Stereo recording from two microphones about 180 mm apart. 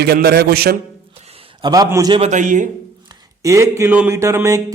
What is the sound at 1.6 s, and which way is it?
Speech, 20° right (ahead or behind).